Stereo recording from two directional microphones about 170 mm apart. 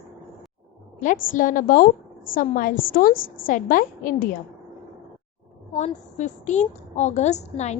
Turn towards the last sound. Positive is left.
turn(degrees=40)  # may be behind; listen again after turning